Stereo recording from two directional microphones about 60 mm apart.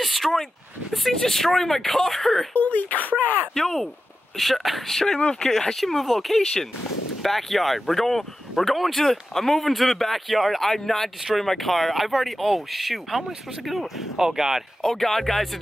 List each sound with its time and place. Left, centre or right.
0.0 s a sound: centre
0.9 s speech: centre
2.5 s speech: left
3.5 s speech: centre
14.8 s speech: centre